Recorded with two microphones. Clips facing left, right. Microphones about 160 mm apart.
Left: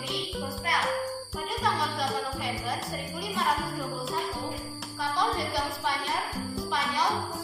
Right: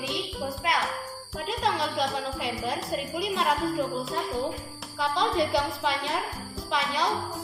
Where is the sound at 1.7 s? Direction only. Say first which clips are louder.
Right 2 dB; 90° right.